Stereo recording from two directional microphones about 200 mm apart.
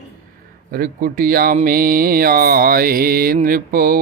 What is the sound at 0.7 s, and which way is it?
Speech, 45° right (ahead or behind).